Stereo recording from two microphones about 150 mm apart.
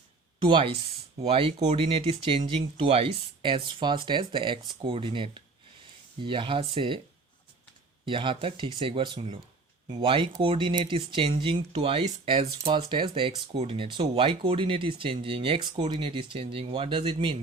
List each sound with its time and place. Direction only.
0.4 s speech: 35° right (ahead or behind)
8.0 s speech: 35° right (ahead or behind)